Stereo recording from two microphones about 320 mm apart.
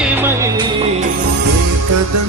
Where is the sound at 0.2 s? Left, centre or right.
Centre.